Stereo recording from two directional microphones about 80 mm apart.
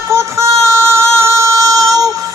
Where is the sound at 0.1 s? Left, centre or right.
Right.